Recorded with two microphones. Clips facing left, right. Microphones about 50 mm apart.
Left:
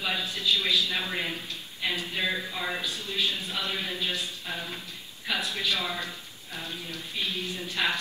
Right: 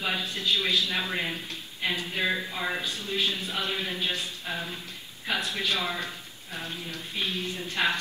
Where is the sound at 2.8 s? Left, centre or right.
Right.